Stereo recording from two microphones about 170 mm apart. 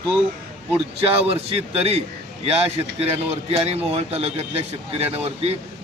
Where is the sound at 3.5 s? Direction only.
35° right (ahead or behind).